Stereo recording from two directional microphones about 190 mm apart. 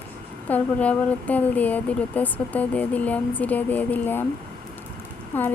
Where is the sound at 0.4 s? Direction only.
10° left (ahead or behind).